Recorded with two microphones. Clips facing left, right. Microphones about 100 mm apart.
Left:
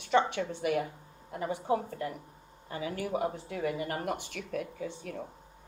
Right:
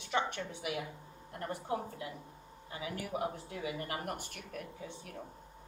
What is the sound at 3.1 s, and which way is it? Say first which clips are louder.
Speech: left 3 dB; 75° left (ahead or behind).